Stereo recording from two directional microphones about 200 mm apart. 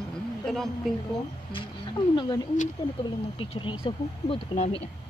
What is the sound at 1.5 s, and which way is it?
Speech, 25° left (ahead or behind).